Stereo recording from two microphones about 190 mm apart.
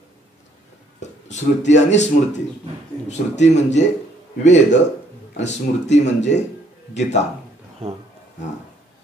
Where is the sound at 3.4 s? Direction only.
35° left (ahead or behind).